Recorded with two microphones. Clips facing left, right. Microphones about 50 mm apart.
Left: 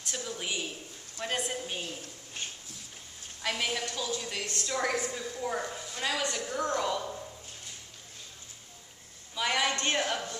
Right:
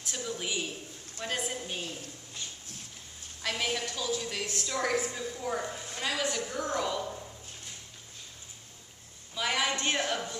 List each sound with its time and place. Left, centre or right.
0.0 s a sound: centre
1.1 s a woman's voice: centre
3.4 s a woman's voice: centre
9.3 s a woman's voice: centre